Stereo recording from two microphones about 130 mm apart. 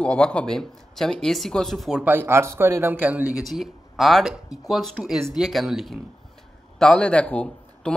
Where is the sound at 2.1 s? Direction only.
20° right (ahead or behind).